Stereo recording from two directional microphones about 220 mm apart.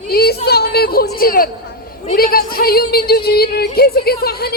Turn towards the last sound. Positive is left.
turn(degrees=45)  # may be behind; listen again after turning